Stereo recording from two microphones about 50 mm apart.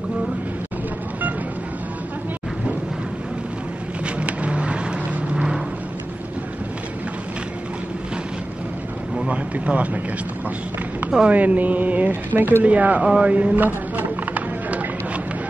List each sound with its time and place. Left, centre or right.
4.0 s vehicle: right
9.3 s boat: right
11.2 s music: right
12.4 s speech: right
12.6 s speech: right
13.1 s a sound: right